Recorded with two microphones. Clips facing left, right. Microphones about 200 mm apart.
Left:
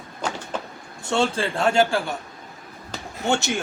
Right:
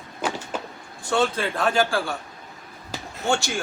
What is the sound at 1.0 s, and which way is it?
Speech, 25° left (ahead or behind).